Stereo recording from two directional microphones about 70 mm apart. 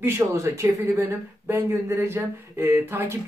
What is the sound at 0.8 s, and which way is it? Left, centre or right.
Speech, right.